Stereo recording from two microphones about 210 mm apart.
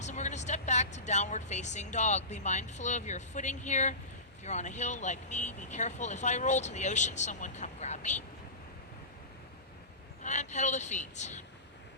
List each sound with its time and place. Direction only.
0.0 s vehicle: 35° left (ahead or behind)
0.9 s speech: 35° left (ahead or behind)
10.2 s speech: 35° left (ahead or behind)